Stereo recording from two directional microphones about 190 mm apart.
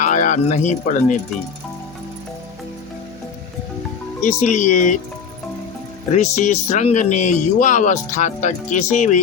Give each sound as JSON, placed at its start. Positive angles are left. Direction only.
{"t": 0.0, "sound": "speech", "side_deg": 40}
{"t": 4.2, "sound": "speech", "side_deg": 40}
{"t": 6.1, "sound": "speech", "side_deg": 40}